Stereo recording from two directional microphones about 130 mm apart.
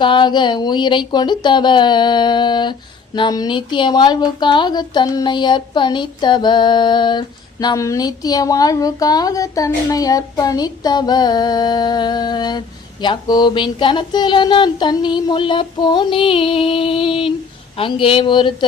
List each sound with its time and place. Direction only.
0.0 s speech: 35° left (ahead or behind)